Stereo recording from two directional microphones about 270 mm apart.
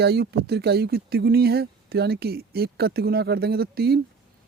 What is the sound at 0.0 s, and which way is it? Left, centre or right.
Speech, right.